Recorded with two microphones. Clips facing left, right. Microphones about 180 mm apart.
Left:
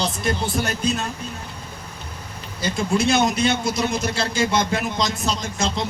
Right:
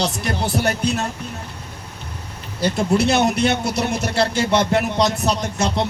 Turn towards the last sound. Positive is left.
turn(degrees=-65)  # may be behind; listen again after turning